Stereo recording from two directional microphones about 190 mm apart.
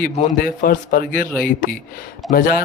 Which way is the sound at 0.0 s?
50° left (ahead or behind).